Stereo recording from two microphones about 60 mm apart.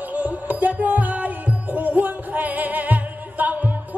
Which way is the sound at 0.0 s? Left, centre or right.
Right.